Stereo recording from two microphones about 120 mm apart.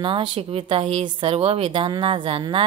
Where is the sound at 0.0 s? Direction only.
45° right (ahead or behind).